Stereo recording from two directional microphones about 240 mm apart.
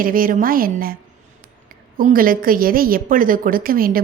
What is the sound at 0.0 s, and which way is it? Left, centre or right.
Speech, right.